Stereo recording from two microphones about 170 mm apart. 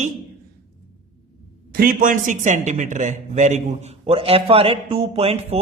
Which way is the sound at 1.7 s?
60° right (ahead or behind).